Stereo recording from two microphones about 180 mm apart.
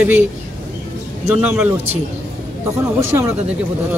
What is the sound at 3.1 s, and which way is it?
Speech, 10° right (ahead or behind).